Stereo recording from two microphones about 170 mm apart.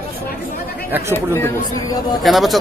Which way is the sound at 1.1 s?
15° left (ahead or behind).